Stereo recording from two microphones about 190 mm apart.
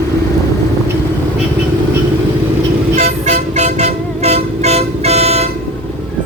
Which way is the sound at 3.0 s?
35° right (ahead or behind).